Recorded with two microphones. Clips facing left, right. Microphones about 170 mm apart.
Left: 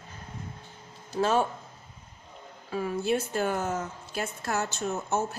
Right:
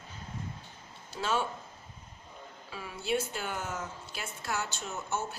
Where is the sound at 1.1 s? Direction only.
45° left (ahead or behind).